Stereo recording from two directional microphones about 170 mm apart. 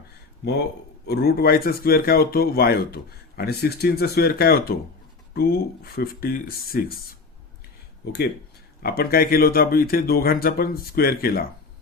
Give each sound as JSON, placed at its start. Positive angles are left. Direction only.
{"t": 1.0, "sound": "speech", "side_deg": 65}
{"t": 8.8, "sound": "speech", "side_deg": 65}